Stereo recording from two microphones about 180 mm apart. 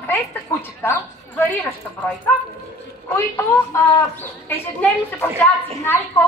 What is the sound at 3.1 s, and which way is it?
Speech, 15° left (ahead or behind).